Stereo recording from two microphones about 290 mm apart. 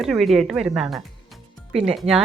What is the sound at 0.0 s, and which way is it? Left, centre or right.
A woman's voice, centre.